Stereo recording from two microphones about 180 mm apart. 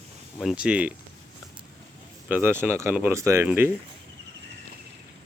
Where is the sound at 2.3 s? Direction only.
10° right (ahead or behind).